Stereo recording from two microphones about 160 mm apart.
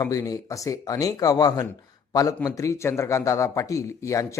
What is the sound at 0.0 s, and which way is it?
A man's voice, 20° left (ahead or behind).